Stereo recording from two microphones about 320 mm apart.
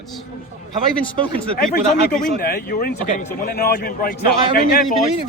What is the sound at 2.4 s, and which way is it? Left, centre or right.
Speech, left.